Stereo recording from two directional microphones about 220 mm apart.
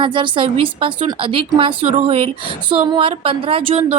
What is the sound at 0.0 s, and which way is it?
A woman's voice, 20° right (ahead or behind).